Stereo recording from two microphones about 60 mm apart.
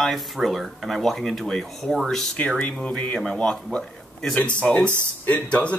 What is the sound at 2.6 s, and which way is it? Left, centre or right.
Speech, centre.